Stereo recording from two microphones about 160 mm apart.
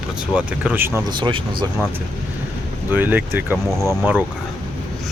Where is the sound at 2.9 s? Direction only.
10° right (ahead or behind).